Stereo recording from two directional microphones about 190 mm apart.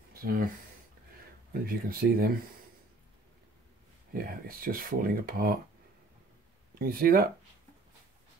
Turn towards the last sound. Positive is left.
turn(degrees=-50)  # may be behind; listen again after turning